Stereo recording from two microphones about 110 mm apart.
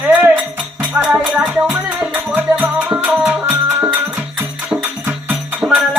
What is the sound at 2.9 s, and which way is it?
Music, 10° right (ahead or behind).